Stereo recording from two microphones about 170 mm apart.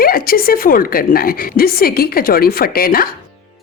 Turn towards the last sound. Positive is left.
turn(degrees=60)  # may be behind; listen again after turning